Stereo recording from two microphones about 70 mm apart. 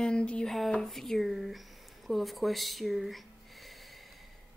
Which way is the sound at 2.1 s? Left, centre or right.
Centre.